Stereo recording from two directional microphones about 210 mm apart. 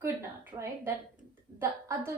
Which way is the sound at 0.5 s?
25° right (ahead or behind).